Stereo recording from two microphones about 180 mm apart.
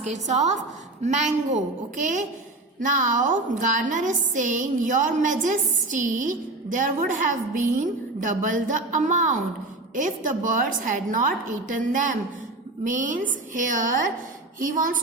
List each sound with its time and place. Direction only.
0.0 s a woman's voice: 40° right (ahead or behind)